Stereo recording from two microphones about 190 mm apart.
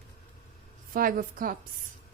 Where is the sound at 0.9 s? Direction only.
50° right (ahead or behind).